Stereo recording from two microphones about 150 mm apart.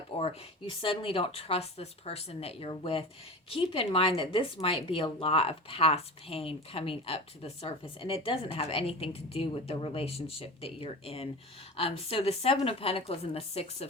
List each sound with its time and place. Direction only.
0.1 s speech: 40° left (ahead or behind)